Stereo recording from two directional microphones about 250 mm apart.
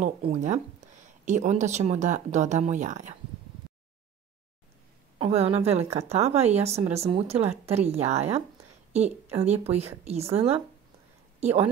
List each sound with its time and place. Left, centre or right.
0.0 s a woman's voice: right
5.2 s a woman's voice: right